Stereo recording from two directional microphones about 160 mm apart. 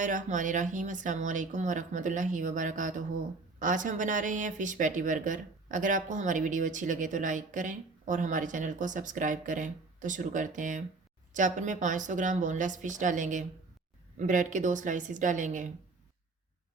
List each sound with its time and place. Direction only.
0.0 s speech: 50° right (ahead or behind)